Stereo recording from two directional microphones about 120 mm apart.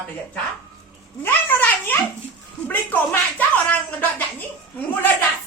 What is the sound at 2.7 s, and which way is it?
Speech, 15° left (ahead or behind).